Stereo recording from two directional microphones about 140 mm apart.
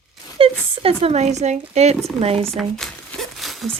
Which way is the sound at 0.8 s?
45° right (ahead or behind).